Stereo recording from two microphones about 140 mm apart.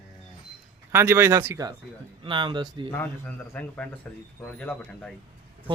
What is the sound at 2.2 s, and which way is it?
Speech, 35° right (ahead or behind).